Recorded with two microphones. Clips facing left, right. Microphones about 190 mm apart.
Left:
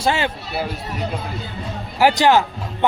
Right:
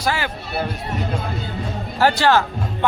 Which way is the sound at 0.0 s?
25° left (ahead or behind).